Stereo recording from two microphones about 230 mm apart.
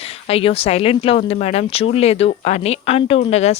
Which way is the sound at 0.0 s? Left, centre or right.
Left.